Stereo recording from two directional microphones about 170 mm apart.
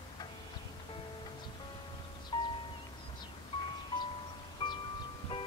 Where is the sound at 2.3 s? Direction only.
30° left (ahead or behind).